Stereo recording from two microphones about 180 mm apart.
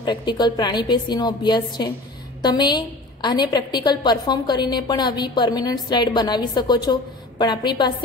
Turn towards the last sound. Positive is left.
turn(degrees=25)  # may be behind; listen again after turning